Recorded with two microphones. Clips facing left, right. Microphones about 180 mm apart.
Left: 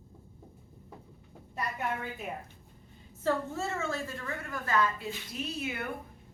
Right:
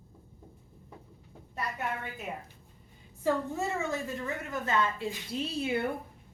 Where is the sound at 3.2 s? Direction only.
15° right (ahead or behind).